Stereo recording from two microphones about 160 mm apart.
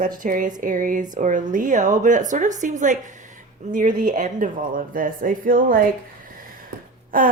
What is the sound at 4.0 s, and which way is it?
Speech, 55° right (ahead or behind).